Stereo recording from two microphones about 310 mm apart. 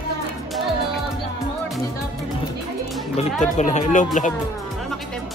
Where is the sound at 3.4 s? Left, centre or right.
Left.